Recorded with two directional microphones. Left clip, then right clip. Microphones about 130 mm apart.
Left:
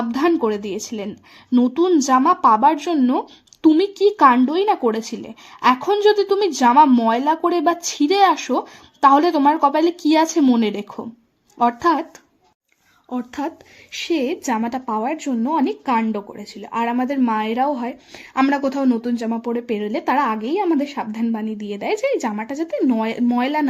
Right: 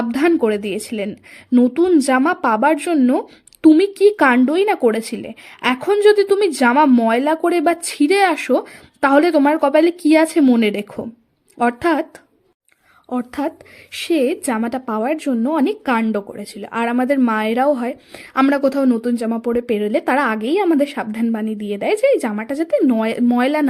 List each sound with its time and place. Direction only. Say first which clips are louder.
0.1 s speech: right 3 dB; 35° right (ahead or behind)
13.1 s speech: right 4 dB; 40° right (ahead or behind)